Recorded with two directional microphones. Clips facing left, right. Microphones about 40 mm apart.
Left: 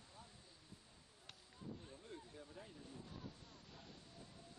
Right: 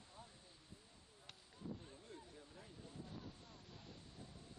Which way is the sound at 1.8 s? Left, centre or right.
Left.